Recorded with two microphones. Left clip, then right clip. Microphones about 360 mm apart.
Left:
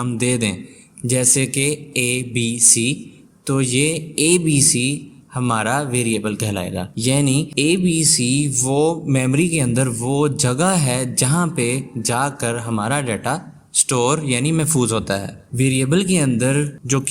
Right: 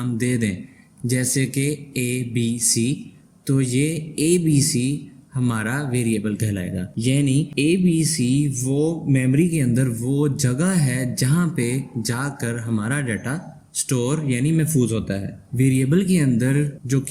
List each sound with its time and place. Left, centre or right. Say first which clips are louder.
0.0 s a man's voice: left 4 dB; centre